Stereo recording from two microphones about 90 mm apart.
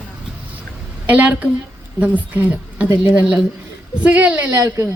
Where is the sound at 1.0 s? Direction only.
15° right (ahead or behind).